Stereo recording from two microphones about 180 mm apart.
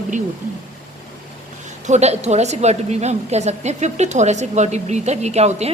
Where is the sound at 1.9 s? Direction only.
40° right (ahead or behind).